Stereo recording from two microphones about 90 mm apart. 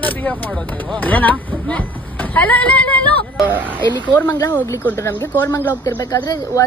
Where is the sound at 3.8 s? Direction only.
55° right (ahead or behind).